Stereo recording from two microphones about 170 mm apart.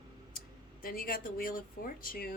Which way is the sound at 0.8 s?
60° left (ahead or behind).